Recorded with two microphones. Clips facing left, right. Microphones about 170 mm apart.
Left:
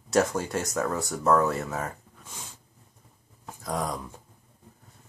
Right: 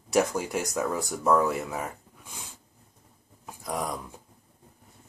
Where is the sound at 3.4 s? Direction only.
10° right (ahead or behind).